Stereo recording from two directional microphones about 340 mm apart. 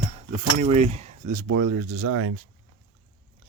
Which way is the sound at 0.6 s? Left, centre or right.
Centre.